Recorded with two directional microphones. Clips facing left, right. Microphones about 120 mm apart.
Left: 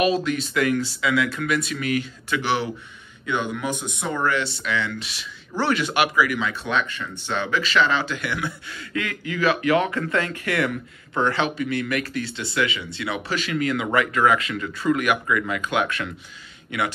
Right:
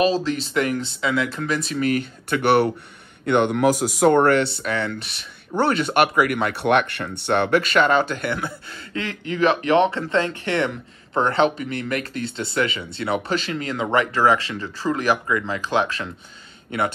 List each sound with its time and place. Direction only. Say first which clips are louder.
0.0 s speech: right 1 dB; 30° right (ahead or behind)
1.9 s speech: right 3 dB; 55° right (ahead or behind)
5.5 s speech: right 4 dB; 25° right (ahead or behind)
5.9 s speech: right 4 dB; 55° right (ahead or behind)
8.4 s speech: even; 30° right (ahead or behind)